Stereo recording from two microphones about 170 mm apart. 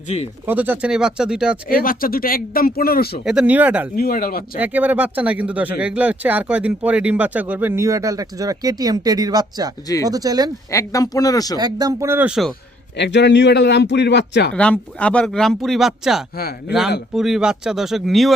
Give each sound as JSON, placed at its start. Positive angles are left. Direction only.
{"t": 0.4, "sound": "speech", "side_deg": -10}
{"t": 1.8, "sound": "speech", "side_deg": 55}
{"t": 3.2, "sound": "speech", "side_deg": -5}
{"t": 3.9, "sound": "speech", "side_deg": 60}
{"t": 4.5, "sound": "speech", "side_deg": -10}
{"t": 10.7, "sound": "speech", "side_deg": 20}
{"t": 11.6, "sound": "speech", "side_deg": -20}
{"t": 13.0, "sound": "a man's voice", "side_deg": 90}
{"t": 14.5, "sound": "speech", "side_deg": 5}
{"t": 16.4, "sound": "a man's voice", "side_deg": 65}
{"t": 17.2, "sound": "speech", "side_deg": 0}